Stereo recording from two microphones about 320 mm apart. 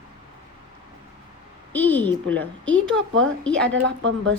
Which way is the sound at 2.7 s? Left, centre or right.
Right.